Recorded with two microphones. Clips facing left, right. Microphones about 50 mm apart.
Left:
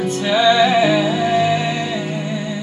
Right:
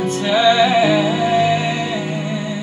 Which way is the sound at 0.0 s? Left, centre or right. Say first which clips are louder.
Right 1 dB; centre.